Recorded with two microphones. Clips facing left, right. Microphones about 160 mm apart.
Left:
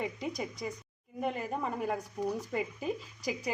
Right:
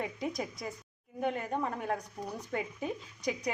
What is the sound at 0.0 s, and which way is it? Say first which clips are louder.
A woman's voice: even; centre (ahead or behind).